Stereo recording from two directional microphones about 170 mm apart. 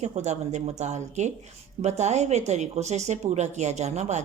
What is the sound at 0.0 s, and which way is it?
Speech, 40° right (ahead or behind).